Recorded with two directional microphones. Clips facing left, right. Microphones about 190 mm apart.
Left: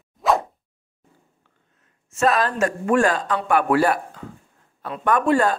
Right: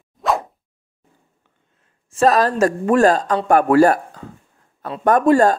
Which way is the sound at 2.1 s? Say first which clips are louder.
Right 5 dB; 40° right (ahead or behind).